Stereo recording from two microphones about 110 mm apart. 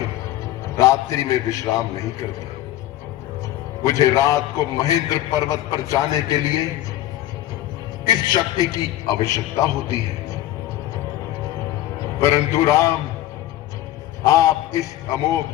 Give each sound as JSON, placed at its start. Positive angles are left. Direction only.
{"t": 0.8, "sound": "a man's voice", "side_deg": 30}
{"t": 3.8, "sound": "a man's voice", "side_deg": 30}
{"t": 8.0, "sound": "a man's voice", "side_deg": 35}
{"t": 12.2, "sound": "a man's voice", "side_deg": 25}
{"t": 14.3, "sound": "a man's voice", "side_deg": 30}